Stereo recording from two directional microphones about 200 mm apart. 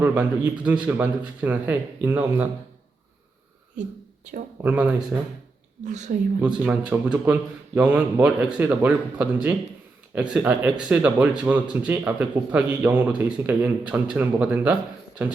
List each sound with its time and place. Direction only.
0.0 s speech: 5° right (ahead or behind)
4.6 s speech: 5° right (ahead or behind)
5.8 s speech: 35° right (ahead or behind)
6.4 s speech: 5° right (ahead or behind)